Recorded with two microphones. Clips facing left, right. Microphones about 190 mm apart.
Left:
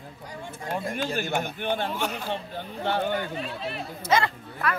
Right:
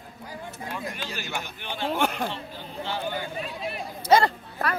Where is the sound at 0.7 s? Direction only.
50° left (ahead or behind).